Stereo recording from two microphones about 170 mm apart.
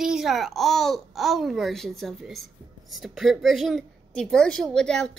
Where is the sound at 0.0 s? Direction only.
5° right (ahead or behind).